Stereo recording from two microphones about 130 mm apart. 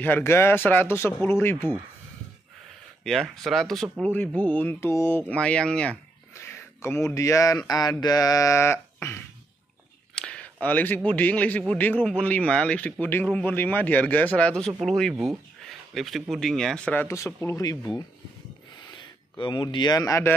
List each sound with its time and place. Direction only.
0.0 s speech: 15° left (ahead or behind)
3.0 s speech: centre (ahead or behind); by 5.2 s 20° left (ahead or behind)
5.3 s speech: 10° left (ahead or behind)
6.3 s speech: 20° left (ahead or behind)
10.1 s a sound: 5° left (ahead or behind)
11.1 s speech: 10° left (ahead or behind)
18.9 s a man's voice: 35° left (ahead or behind)